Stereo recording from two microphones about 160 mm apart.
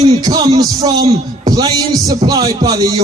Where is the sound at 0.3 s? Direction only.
25° right (ahead or behind).